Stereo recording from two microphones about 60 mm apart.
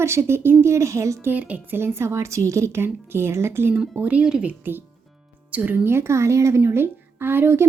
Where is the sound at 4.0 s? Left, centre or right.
Right.